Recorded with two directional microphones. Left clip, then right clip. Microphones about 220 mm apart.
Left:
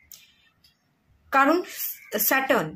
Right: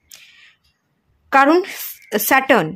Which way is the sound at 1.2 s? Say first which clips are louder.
Right 7 dB; 35° right (ahead or behind).